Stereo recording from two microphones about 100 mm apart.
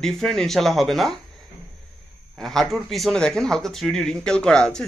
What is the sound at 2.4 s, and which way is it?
Speech, 5° left (ahead or behind).